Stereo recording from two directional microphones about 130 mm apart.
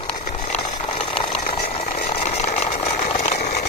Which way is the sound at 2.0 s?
60° left (ahead or behind).